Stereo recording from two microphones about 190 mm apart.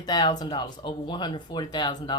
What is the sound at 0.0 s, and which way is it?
Speech, 20° left (ahead or behind).